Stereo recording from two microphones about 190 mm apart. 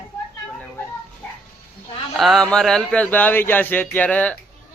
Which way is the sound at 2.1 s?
Centre (ahead or behind).